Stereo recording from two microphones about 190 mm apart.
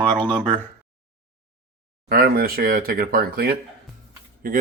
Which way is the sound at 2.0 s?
50° right (ahead or behind).